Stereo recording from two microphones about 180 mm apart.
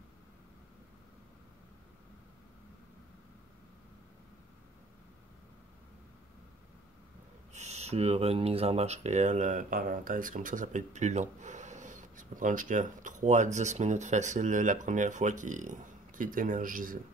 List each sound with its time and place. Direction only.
7.5 s speech: 40° right (ahead or behind)